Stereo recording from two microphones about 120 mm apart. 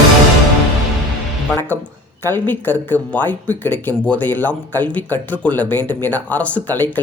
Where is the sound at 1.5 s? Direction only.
15° left (ahead or behind).